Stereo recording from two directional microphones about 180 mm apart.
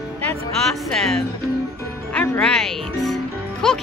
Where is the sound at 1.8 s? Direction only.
15° left (ahead or behind).